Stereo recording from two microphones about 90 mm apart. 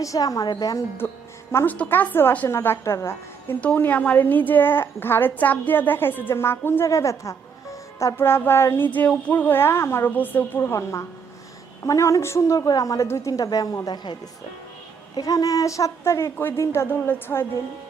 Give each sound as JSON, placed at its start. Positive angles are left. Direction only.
{"t": 0.0, "sound": "speech", "side_deg": 40}
{"t": 1.5, "sound": "a woman's voice", "side_deg": 15}
{"t": 3.6, "sound": "a woman's voice", "side_deg": 15}
{"t": 8.1, "sound": "a woman's voice", "side_deg": 25}
{"t": 15.1, "sound": "speech", "side_deg": 40}